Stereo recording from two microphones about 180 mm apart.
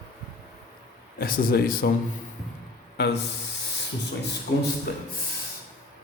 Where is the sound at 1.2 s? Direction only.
55° left (ahead or behind).